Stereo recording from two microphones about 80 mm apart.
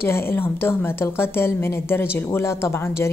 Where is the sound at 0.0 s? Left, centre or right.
Left.